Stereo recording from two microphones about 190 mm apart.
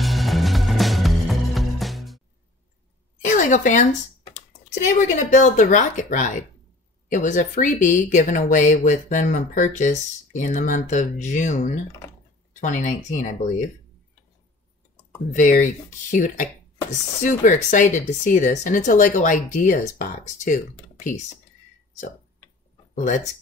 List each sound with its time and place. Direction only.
0.0 s music: centre (ahead or behind)
3.3 s typing: 40° left (ahead or behind)
5.3 s speech: 40° left (ahead or behind)
15.3 s speech: 40° left (ahead or behind)
22.9 s speech: 40° left (ahead or behind)